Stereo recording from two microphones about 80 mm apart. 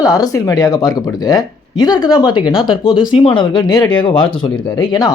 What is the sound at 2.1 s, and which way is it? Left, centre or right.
Speech, left.